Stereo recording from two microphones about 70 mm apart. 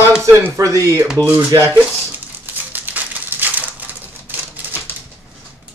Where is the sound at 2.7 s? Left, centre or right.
Right.